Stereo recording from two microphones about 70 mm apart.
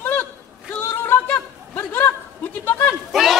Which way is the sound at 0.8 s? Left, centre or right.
Left.